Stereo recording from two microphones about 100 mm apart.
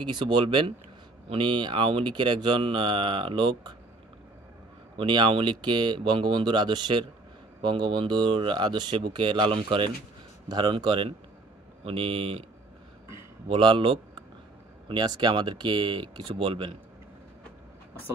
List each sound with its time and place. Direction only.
0.0 s speech: 50° right (ahead or behind)
4.9 s speech: 50° right (ahead or behind)
11.8 s speech: 70° right (ahead or behind)
13.5 s speech: 55° right (ahead or behind)